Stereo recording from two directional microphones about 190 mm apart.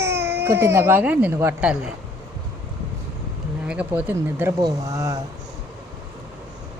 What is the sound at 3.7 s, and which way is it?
Speech, 5° right (ahead or behind).